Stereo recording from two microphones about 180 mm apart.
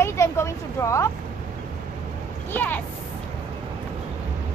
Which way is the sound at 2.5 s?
10° left (ahead or behind).